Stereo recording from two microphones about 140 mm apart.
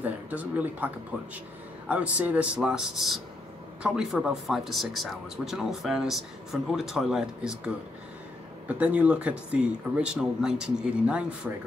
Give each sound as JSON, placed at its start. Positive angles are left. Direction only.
{"t": 0.0, "sound": "speech", "side_deg": -10}